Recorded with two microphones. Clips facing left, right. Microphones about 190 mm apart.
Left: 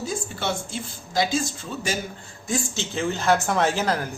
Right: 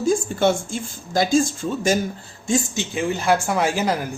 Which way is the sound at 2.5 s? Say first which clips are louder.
Right 5 dB; 15° right (ahead or behind).